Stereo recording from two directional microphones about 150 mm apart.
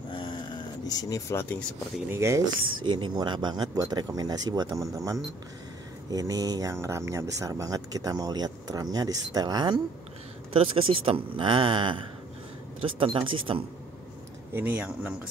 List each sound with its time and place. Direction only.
0.1 s a sound: 35° left (ahead or behind); by 1.6 s 15° left (ahead or behind)
2.0 s speech: 20° right (ahead or behind)
2.8 s speech: 30° right (ahead or behind)
10.5 s speech: 40° right (ahead or behind)
14.5 s a man's voice: 15° right (ahead or behind)